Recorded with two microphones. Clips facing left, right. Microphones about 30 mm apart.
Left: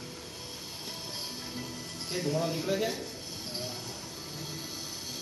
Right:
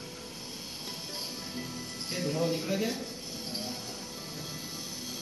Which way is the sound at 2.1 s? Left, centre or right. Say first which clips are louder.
Left 1 dB; centre.